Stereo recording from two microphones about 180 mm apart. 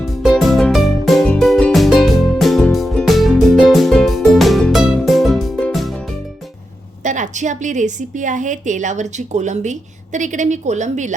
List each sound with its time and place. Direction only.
0.2 s music: centre (ahead or behind)
7.0 s a woman's voice: 45° right (ahead or behind)